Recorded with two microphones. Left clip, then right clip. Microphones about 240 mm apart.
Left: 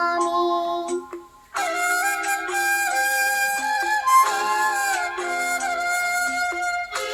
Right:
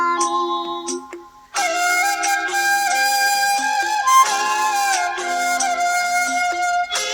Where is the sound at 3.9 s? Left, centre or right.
Right.